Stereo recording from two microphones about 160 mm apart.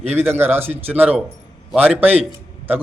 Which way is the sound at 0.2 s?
15° right (ahead or behind).